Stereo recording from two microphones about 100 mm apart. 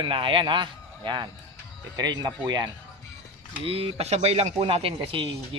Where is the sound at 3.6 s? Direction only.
70° right (ahead or behind).